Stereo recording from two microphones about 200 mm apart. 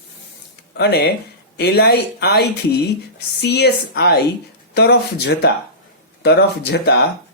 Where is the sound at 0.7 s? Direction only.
55° left (ahead or behind).